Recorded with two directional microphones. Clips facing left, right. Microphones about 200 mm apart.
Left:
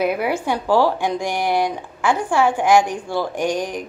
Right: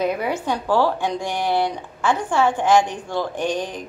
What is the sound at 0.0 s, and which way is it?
Speech, 10° left (ahead or behind).